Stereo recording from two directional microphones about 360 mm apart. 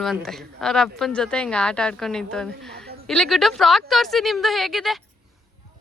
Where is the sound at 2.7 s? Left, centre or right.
Right.